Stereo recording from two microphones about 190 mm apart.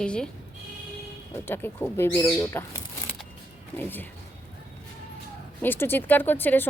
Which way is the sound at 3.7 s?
10° left (ahead or behind).